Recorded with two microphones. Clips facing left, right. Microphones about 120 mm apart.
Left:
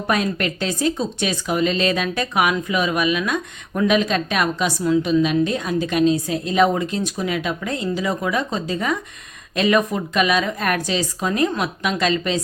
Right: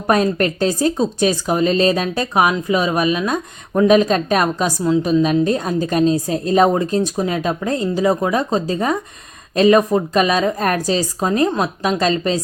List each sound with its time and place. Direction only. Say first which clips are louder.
0.1 s speech: right 6 dB; 40° right (ahead or behind)